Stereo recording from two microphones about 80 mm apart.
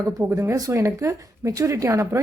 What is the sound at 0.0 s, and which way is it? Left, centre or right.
Speech, right.